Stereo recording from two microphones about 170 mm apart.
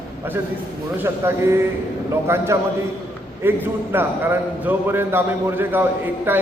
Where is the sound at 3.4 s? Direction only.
15° right (ahead or behind).